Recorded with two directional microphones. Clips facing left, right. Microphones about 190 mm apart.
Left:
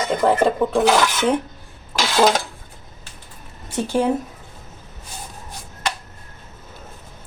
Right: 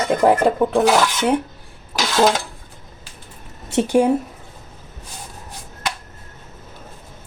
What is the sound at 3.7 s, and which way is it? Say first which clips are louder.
Speech: right 5 dB; 20° right (ahead or behind).